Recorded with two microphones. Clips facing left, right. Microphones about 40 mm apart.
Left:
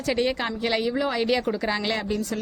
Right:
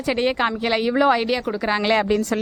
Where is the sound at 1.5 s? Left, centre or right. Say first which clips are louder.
Right 4 dB; centre.